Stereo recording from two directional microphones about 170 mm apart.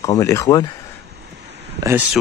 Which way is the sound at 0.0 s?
20° left (ahead or behind).